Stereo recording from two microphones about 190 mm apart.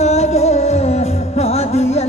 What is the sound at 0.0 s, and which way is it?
Music, 35° left (ahead or behind).